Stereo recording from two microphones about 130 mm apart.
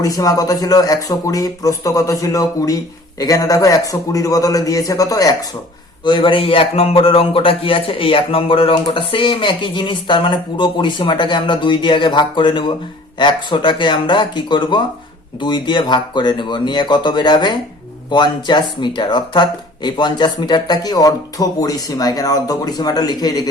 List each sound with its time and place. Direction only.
0.0 s speech: 25° left (ahead or behind)
6.1 s speech: 40° left (ahead or behind)